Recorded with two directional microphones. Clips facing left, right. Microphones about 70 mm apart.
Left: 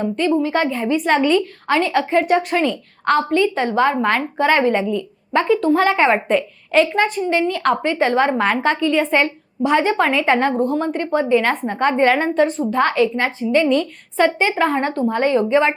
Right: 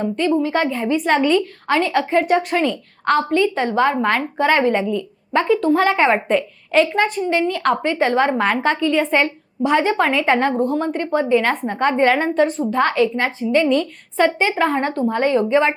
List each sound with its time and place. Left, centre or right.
0.4 s a woman's voice: left